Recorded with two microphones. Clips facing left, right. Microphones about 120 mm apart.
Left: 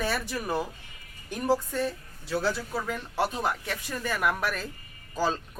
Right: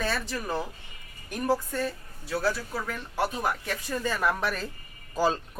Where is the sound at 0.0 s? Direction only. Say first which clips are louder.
Left 1 dB; 15° left (ahead or behind).